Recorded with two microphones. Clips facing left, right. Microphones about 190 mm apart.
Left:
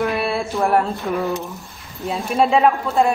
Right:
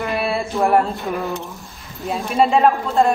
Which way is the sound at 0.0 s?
Centre (ahead or behind).